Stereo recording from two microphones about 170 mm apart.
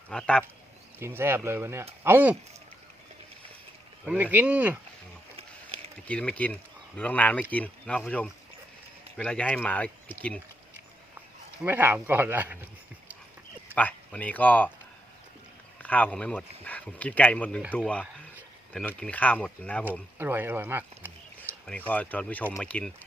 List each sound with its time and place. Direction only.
0.1 s speech: 5° left (ahead or behind)
0.9 s speech: 15° right (ahead or behind)
4.0 s speech: 10° right (ahead or behind)
5.4 s a sound: 35° right (ahead or behind)
6.1 s speech: 5° left (ahead or behind)
11.6 s speech: 10° right (ahead or behind)
13.7 s speech: 10° left (ahead or behind)
15.8 s speech: 10° left (ahead or behind)
20.1 s speech: 15° right (ahead or behind)
21.7 s speech: 10° left (ahead or behind)